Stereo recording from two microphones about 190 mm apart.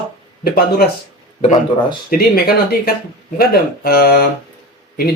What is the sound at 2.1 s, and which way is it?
Speech, 50° left (ahead or behind).